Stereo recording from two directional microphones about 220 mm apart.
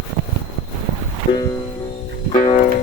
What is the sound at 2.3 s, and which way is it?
Music, 35° left (ahead or behind).